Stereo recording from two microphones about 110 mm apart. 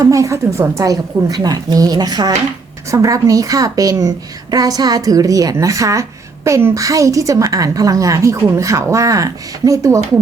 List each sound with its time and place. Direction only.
0.0 s a woman's voice: 30° right (ahead or behind)